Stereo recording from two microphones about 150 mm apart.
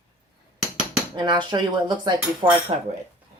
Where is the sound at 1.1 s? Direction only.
30° right (ahead or behind).